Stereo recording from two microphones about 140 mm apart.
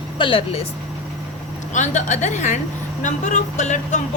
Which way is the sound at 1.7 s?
60° left (ahead or behind).